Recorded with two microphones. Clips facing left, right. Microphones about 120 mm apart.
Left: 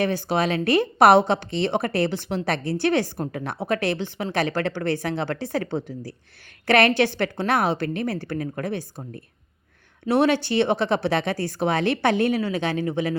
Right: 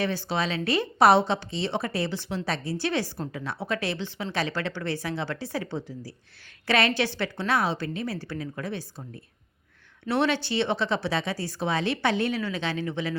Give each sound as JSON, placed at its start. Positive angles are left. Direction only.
{"t": 0.0, "sound": "a woman's voice", "side_deg": 50}